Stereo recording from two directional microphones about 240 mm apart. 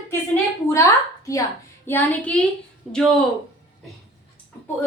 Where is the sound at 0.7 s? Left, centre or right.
Centre.